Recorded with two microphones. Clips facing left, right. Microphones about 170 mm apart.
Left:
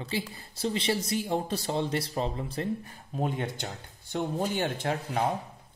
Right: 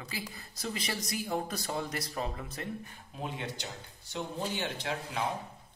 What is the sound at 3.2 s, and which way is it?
Speech, 50° left (ahead or behind).